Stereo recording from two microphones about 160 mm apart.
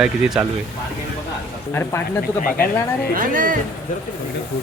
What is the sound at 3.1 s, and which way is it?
Speech, 60° right (ahead or behind).